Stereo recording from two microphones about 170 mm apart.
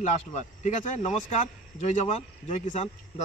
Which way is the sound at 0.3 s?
45° left (ahead or behind).